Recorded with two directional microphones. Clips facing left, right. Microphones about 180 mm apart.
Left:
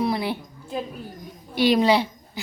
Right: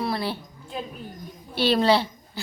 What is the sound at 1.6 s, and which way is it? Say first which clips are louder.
Speech: left 2 dB; 15° left (ahead or behind).